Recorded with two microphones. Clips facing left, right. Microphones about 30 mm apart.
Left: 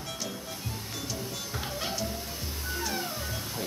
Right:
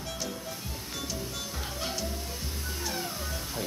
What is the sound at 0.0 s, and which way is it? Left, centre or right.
Music, centre.